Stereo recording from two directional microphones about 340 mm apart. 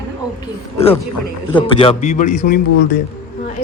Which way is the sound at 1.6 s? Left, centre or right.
Centre.